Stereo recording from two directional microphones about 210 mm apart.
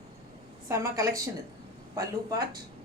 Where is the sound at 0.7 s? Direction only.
15° right (ahead or behind).